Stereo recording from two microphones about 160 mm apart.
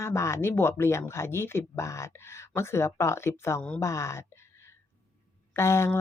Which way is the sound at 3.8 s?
20° left (ahead or behind).